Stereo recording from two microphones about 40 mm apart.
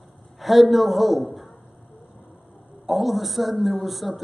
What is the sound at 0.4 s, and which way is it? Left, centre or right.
A man's voice, centre.